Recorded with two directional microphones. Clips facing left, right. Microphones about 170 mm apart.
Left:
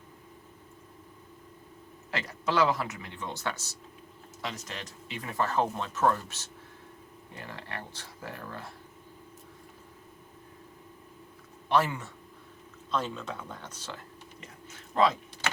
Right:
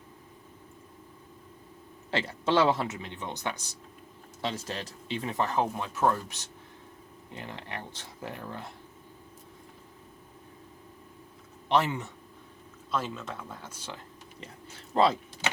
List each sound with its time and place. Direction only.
2.0 s speech: 30° right (ahead or behind)
4.4 s speech: 30° right (ahead or behind)
11.7 s speech: 20° right (ahead or behind)
12.9 s speech: 5° right (ahead or behind)
14.4 s speech: 30° right (ahead or behind)